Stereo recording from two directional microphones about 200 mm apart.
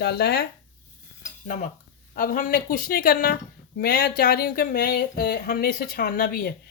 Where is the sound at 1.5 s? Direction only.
40° left (ahead or behind).